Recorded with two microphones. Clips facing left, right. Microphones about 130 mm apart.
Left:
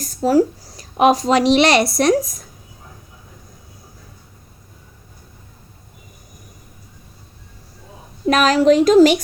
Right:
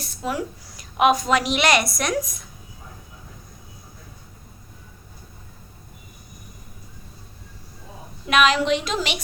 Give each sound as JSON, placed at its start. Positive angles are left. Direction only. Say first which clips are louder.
{"t": 0.0, "sound": "a woman's voice", "louder": "left 12 dB", "side_deg": 40}
{"t": 8.3, "sound": "speech", "louder": "left 6 dB", "side_deg": 40}